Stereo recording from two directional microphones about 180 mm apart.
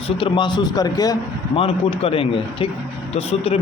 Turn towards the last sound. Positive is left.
turn(degrees=35)  # may be behind; listen again after turning